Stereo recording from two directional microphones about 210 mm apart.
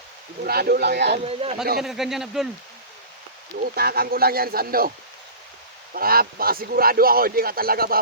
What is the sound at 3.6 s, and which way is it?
A man's voice, 45° right (ahead or behind).